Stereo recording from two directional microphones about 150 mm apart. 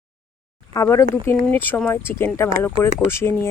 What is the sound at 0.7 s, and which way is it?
Speech, 20° left (ahead or behind).